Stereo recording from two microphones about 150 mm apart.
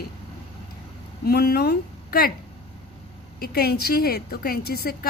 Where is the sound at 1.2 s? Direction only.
90° left.